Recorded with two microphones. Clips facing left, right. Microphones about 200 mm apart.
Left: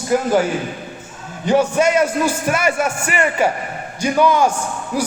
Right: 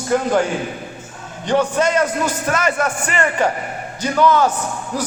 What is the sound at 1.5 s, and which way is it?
A man's voice, 10° left (ahead or behind).